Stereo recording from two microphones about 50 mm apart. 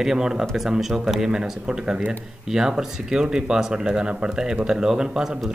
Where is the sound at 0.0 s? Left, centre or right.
Centre.